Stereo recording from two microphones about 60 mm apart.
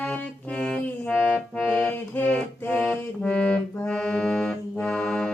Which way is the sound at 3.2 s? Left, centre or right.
Centre.